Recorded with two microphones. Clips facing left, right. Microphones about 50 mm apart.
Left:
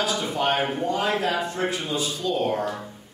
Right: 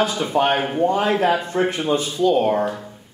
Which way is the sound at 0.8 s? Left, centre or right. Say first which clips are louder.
Right 6 dB; right.